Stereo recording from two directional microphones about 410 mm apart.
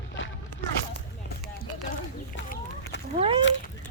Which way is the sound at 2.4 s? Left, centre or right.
Left.